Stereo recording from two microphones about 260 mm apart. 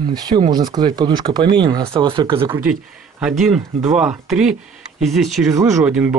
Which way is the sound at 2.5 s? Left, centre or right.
Centre.